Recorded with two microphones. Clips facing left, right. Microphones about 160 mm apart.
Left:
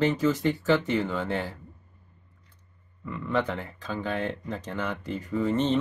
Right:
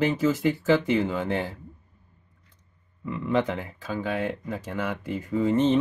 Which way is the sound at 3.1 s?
15° right (ahead or behind).